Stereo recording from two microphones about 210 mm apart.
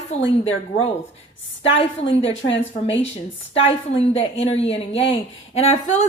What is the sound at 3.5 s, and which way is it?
A woman's voice, 30° left (ahead or behind).